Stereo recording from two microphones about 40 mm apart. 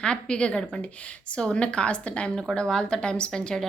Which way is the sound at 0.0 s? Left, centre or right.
Left.